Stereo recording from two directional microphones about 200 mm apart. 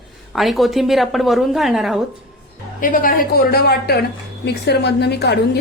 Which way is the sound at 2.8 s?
45° left (ahead or behind).